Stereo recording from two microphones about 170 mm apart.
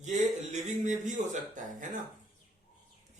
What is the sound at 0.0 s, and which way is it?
A man's voice, 45° right (ahead or behind).